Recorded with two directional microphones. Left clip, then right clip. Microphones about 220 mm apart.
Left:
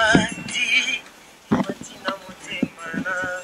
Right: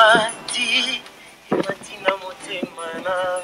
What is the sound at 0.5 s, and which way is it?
Music, 25° right (ahead or behind).